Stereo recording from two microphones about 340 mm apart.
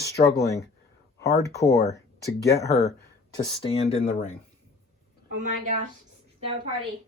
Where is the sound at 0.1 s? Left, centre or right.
Centre.